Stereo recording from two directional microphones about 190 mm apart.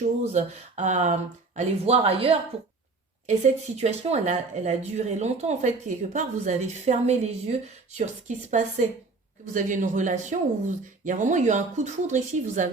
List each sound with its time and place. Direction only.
0.3 s speech: 35° right (ahead or behind)